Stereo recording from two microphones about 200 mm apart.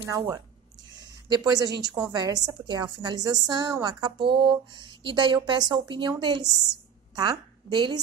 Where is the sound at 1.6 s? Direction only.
55° right (ahead or behind).